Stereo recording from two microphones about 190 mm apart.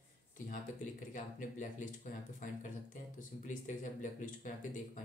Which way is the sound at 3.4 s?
40° left (ahead or behind).